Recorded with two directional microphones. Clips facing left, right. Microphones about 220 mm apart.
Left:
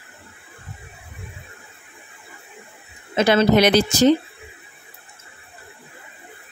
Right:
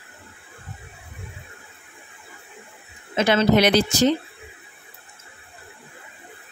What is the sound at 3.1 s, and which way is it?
Speech, 35° left (ahead or behind).